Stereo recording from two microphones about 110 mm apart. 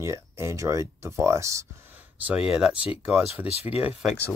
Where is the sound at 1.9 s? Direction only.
15° right (ahead or behind).